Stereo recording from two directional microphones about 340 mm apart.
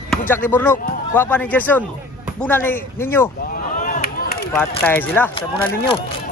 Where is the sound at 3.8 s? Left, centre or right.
Left.